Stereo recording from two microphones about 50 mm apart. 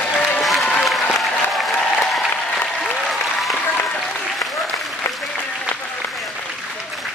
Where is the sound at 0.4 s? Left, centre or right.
Centre.